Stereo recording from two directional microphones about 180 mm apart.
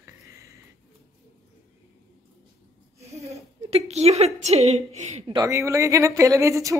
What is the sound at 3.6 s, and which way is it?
A woman's voice, 35° right (ahead or behind).